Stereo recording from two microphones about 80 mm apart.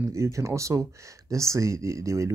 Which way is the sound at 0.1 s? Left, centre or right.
Right.